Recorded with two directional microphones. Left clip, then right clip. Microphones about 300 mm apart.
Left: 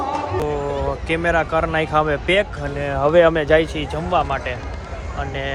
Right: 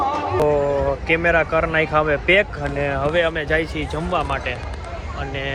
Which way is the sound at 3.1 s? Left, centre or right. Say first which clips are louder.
Left 9 dB; left.